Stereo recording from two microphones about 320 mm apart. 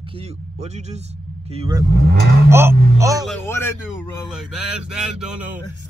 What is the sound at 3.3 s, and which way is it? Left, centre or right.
A man's voice, centre.